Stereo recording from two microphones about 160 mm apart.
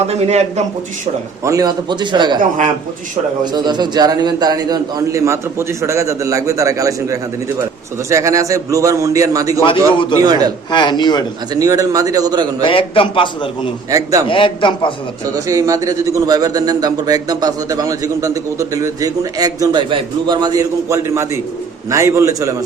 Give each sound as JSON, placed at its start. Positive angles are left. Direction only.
{"t": 0.1, "sound": "a man's voice", "side_deg": -45}
{"t": 1.5, "sound": "speech", "side_deg": -25}
{"t": 3.4, "sound": "speech", "side_deg": -25}
{"t": 9.9, "sound": "a man's voice", "side_deg": 30}
{"t": 10.2, "sound": "speech", "side_deg": -25}
{"t": 10.7, "sound": "a man's voice", "side_deg": 30}
{"t": 11.5, "sound": "speech", "side_deg": -20}
{"t": 12.6, "sound": "a man's voice", "side_deg": 35}
{"t": 13.9, "sound": "speech", "side_deg": -20}
{"t": 14.3, "sound": "a man's voice", "side_deg": 30}
{"t": 15.4, "sound": "speech", "side_deg": -20}